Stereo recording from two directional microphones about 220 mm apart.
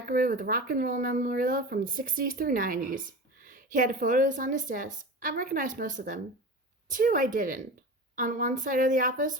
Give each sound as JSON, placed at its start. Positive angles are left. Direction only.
{"t": 0.1, "sound": "speech", "side_deg": -40}